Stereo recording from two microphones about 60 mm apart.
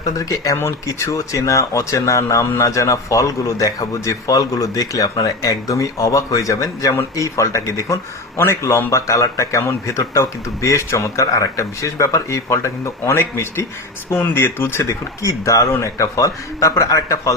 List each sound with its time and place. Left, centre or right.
0.0 s speech: left
14.1 s speech: left
14.8 s speech: left